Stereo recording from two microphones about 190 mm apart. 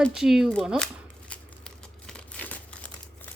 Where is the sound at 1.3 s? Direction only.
5° left (ahead or behind).